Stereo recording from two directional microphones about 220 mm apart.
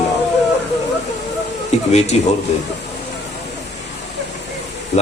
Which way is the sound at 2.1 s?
30° left (ahead or behind).